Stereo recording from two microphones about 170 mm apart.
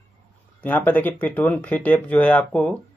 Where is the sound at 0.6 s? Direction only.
10° left (ahead or behind).